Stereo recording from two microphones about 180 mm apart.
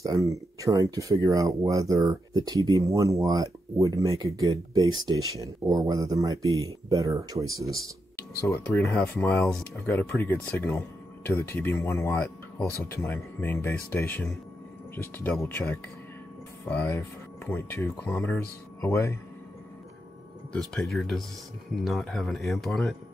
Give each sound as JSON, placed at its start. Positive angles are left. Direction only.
{"t": 0.0, "sound": "speech", "side_deg": -20}
{"t": 8.5, "sound": "speech", "side_deg": 10}
{"t": 20.5, "sound": "speech", "side_deg": 0}